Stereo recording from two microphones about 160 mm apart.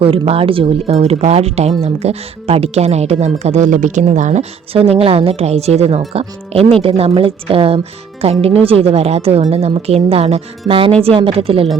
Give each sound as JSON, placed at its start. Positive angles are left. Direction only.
{"t": 0.0, "sound": "speech", "side_deg": -35}